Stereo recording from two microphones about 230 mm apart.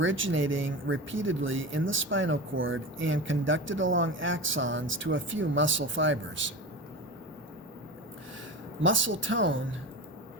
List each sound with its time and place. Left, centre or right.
0.0 s speech: right
8.8 s speech: right